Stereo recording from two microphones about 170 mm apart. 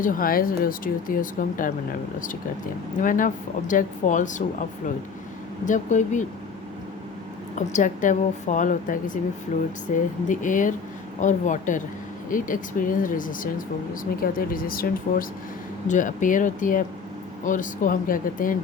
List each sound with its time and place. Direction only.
0.0 s speech: 55° left (ahead or behind)
3.0 s speech: 50° left (ahead or behind)
5.6 s speech: 45° left (ahead or behind)
7.7 s speech: 50° left (ahead or behind)